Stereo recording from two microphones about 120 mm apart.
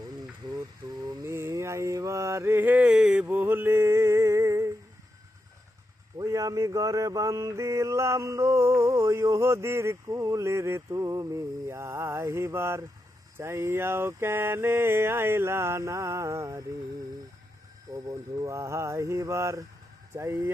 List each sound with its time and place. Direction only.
0.8 s lullaby: 30° right (ahead or behind)
1.2 s mantra: 25° right (ahead or behind)
6.1 s mantra: 30° right (ahead or behind)
17.9 s mantra: 25° right (ahead or behind)